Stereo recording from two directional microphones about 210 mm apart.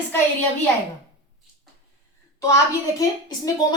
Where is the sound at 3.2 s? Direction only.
20° left (ahead or behind).